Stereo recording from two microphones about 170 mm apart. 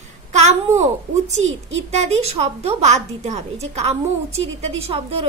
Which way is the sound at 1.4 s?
35° right (ahead or behind).